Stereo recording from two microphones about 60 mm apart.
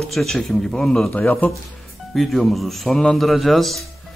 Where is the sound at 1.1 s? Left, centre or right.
Left.